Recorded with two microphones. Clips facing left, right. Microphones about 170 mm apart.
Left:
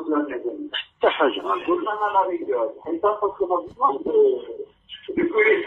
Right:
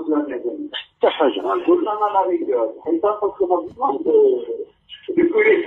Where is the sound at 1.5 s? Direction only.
80° right.